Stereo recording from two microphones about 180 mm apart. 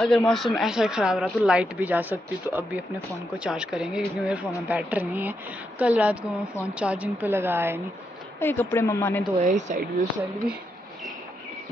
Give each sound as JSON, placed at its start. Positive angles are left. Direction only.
{"t": 0.0, "sound": "a woman's voice", "side_deg": 0}
{"t": 8.4, "sound": "speech", "side_deg": 10}
{"t": 9.4, "sound": "speech", "side_deg": -40}